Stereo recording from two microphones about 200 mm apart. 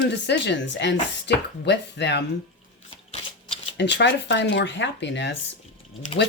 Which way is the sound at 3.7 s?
60° left (ahead or behind).